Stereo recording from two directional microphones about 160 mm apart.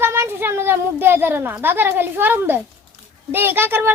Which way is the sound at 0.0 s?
15° right (ahead or behind).